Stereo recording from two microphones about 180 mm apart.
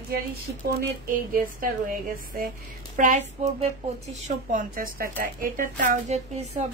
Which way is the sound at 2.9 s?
45° right (ahead or behind).